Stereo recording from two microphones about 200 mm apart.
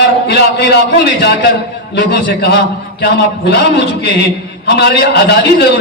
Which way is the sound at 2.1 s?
55° left (ahead or behind).